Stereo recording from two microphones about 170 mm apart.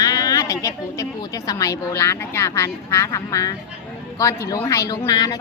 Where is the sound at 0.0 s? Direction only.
20° left (ahead or behind).